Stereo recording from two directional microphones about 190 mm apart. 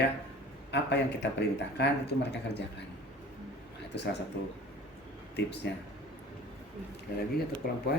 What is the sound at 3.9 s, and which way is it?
Speech, 60° left (ahead or behind).